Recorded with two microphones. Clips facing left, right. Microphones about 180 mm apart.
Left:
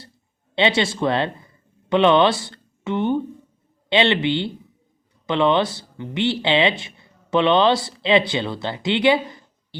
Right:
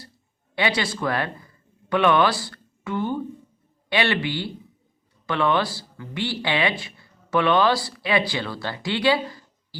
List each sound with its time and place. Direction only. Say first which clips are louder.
0.5 s speech: left 5 dB; 25° left (ahead or behind)